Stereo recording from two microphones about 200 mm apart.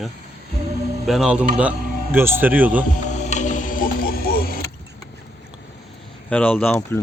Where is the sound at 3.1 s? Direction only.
35° left (ahead or behind).